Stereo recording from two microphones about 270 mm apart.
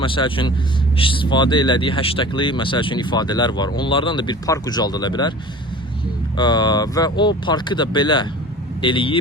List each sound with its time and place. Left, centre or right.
0.0 s speech: centre
6.3 s speech: centre